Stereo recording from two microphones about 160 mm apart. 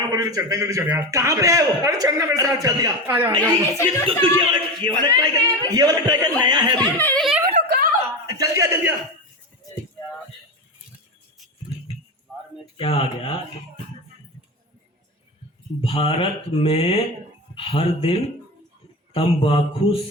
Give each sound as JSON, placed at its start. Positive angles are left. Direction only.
{"t": 0.1, "sound": "a man's voice", "side_deg": -20}
{"t": 3.4, "sound": "speech", "side_deg": 10}
{"t": 4.2, "sound": "a man's voice", "side_deg": -30}
{"t": 7.0, "sound": "speech", "side_deg": 10}
{"t": 7.5, "sound": "a sound", "side_deg": -65}
{"t": 8.4, "sound": "a man's voice", "side_deg": -20}
{"t": 12.7, "sound": "mantra", "side_deg": 35}
{"t": 15.8, "sound": "mantra", "side_deg": 35}